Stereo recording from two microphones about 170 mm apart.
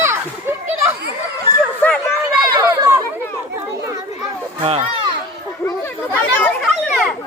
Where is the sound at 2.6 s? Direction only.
20° right (ahead or behind).